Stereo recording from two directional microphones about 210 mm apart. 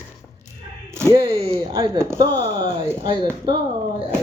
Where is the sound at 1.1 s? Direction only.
25° right (ahead or behind).